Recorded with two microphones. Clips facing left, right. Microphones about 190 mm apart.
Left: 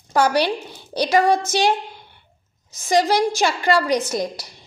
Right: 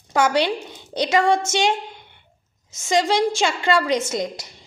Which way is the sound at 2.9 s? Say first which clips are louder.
Left 1 dB; 25° right (ahead or behind).